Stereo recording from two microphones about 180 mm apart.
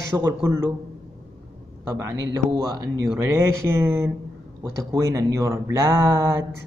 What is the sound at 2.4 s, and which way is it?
Speech, 40° right (ahead or behind).